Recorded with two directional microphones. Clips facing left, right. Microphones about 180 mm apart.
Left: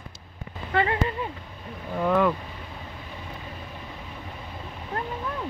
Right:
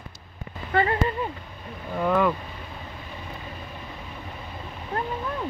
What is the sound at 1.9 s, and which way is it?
Speech, centre (ahead or behind).